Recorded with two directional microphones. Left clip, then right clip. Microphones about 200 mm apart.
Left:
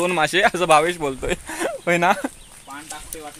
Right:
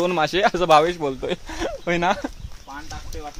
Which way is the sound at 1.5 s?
20° left (ahead or behind).